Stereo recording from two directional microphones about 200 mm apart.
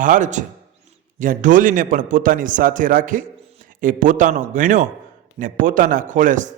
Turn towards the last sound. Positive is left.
turn(degrees=-40)  # may be behind; listen again after turning